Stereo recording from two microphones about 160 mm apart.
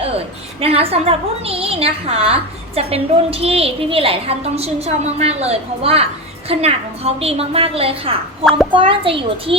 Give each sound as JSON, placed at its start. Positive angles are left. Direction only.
{"t": 0.6, "sound": "a woman's voice", "side_deg": -40}